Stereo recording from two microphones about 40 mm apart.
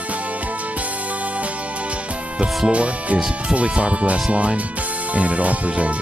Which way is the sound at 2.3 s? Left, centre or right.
Right.